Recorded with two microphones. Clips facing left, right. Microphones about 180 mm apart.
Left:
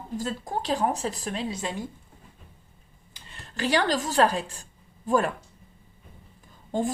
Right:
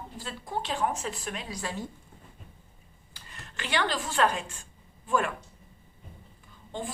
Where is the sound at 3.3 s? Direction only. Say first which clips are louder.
Left 6 dB; 35° left (ahead or behind).